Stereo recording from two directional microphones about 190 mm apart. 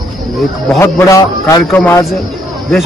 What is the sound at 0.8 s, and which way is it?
A man's voice, 15° left (ahead or behind).